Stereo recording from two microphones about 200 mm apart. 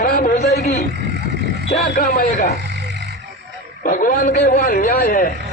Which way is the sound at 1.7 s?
45° left (ahead or behind).